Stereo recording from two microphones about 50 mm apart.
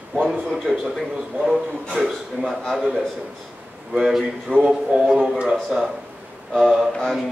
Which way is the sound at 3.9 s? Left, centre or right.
Centre.